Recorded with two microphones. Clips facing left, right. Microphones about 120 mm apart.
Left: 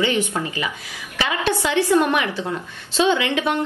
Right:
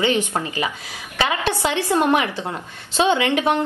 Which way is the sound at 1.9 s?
20° right (ahead or behind).